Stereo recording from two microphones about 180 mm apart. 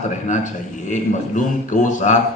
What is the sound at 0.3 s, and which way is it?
A man's voice, 45° left (ahead or behind).